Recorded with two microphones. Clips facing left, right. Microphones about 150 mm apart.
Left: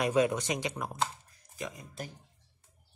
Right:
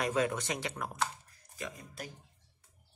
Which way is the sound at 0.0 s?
15° left (ahead or behind).